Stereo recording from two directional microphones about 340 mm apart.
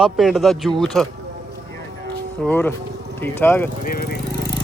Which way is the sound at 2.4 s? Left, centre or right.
Centre.